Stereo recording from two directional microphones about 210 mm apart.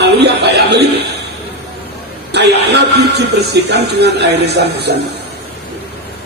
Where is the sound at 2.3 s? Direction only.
55° right (ahead or behind).